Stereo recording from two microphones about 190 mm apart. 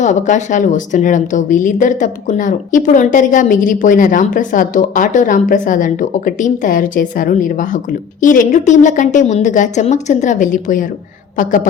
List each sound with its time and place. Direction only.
0.0 s a woman's voice: 40° left (ahead or behind)